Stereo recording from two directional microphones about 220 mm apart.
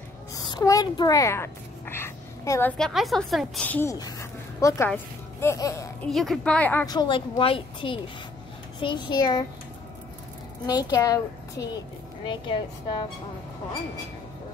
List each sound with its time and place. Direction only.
0.3 s a sound: 15° left (ahead or behind)
2.8 s a woman's voice: centre (ahead or behind)
6.0 s a woman's voice: centre (ahead or behind); by 9.4 s 20° left (ahead or behind)
10.7 s a woman's voice: 15° left (ahead or behind)